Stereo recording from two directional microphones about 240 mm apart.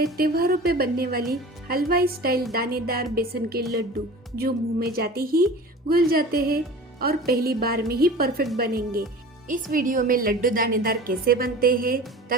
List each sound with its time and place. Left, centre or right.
0.2 s a woman's voice: right